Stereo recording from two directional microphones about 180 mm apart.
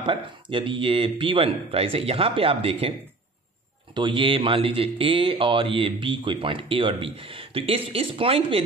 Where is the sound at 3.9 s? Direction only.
30° right (ahead or behind).